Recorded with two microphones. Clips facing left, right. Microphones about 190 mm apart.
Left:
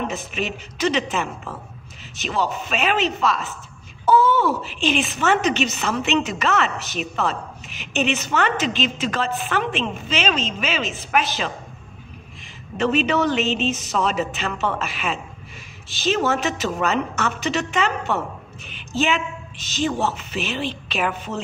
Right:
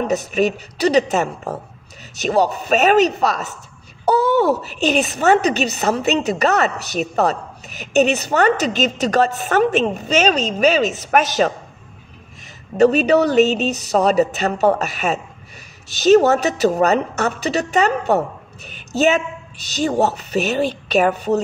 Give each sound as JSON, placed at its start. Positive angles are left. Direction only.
{"t": 0.0, "sound": "a woman's voice", "side_deg": -40}
{"t": 12.7, "sound": "a woman's voice", "side_deg": -40}